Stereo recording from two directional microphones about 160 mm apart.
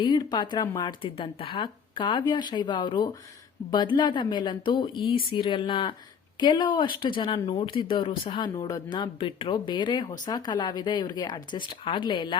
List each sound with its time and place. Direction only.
0.0 s speech: 25° left (ahead or behind)